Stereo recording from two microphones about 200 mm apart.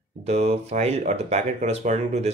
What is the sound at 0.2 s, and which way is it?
Speech, 30° right (ahead or behind).